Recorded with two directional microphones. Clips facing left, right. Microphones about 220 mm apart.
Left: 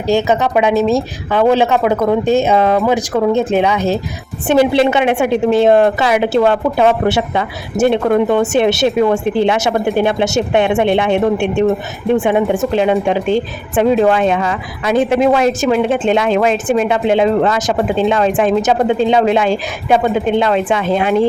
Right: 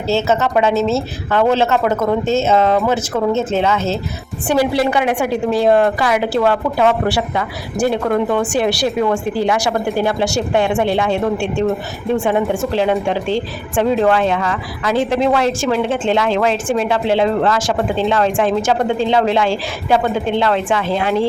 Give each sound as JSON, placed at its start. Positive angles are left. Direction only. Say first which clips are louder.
{"t": 0.1, "sound": "a woman's voice", "louder": "left 2 dB", "side_deg": 15}